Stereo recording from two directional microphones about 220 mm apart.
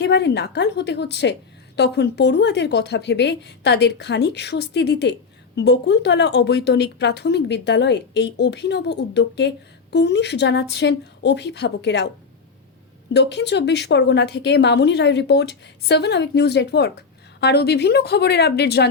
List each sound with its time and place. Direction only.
0.0 s a woman's voice: 50° left (ahead or behind)
13.1 s a woman's voice: 50° left (ahead or behind)